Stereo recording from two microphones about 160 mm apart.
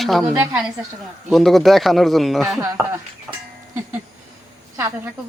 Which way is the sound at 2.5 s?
20° right (ahead or behind).